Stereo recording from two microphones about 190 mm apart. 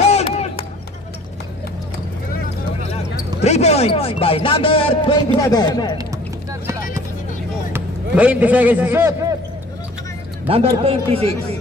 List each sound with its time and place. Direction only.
0.0 s a sound: 35° left (ahead or behind)
3.4 s speech: 35° left (ahead or behind)
7.7 s a man's voice: 5° right (ahead or behind)
10.5 s a man's voice: 30° right (ahead or behind)